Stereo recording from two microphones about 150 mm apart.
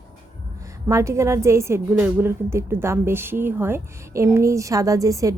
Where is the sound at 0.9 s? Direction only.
20° right (ahead or behind).